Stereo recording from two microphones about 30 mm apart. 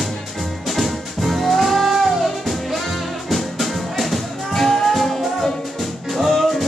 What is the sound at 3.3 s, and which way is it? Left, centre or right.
Music, centre.